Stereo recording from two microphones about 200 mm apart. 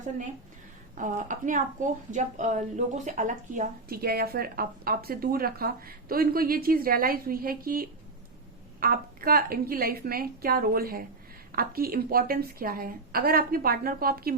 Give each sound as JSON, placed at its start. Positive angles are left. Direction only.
{"t": 0.9, "sound": "a woman's voice", "side_deg": -40}